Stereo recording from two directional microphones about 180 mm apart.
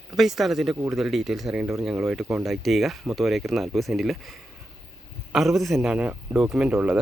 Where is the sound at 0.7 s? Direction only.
15° right (ahead or behind).